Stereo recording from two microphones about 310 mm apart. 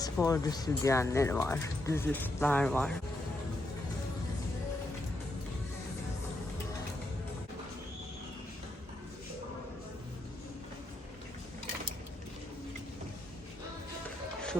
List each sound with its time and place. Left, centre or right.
0.0 s speech: centre